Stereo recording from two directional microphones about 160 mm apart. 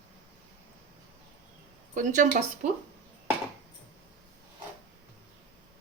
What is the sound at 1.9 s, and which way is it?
Speech, 55° right (ahead or behind).